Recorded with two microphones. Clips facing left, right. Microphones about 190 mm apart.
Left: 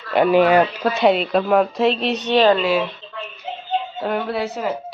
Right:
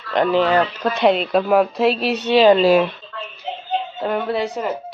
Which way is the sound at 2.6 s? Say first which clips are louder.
Right 5 dB; 40° right (ahead or behind).